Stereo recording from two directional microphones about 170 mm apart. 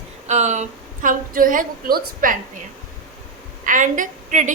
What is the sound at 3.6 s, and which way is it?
Speech, 50° right (ahead or behind).